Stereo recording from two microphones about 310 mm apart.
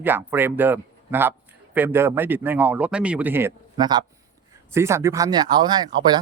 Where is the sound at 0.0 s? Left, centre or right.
Centre.